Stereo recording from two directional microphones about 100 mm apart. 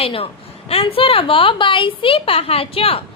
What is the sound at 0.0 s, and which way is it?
A woman's voice, 70° left (ahead or behind).